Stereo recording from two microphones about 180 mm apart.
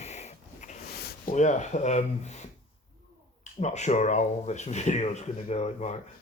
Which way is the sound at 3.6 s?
40° left (ahead or behind).